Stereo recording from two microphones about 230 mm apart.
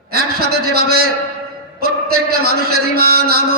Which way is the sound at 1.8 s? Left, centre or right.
Right.